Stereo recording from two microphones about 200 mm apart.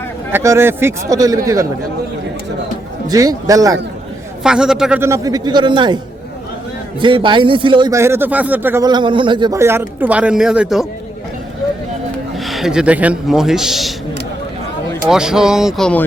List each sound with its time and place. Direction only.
0.3 s a man's voice: 15° right (ahead or behind)
3.1 s a man's voice: 20° right (ahead or behind)
4.4 s a man's voice: 5° right (ahead or behind); by 6.0 s 25° right (ahead or behind)
7.0 s a man's voice: 25° right (ahead or behind); by 10.8 s 5° right (ahead or behind)
12.4 s a man's voice: centre (ahead or behind)
15.1 s speech: 5° right (ahead or behind)